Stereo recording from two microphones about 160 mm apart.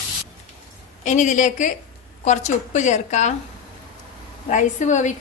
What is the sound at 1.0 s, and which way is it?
A woman's voice, 50° left (ahead or behind).